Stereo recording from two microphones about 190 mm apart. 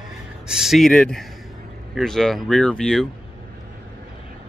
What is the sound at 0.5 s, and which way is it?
Speech, centre (ahead or behind).